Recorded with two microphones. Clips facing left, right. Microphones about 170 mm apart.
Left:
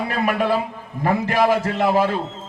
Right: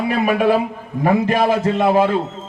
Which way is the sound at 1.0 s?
20° right (ahead or behind).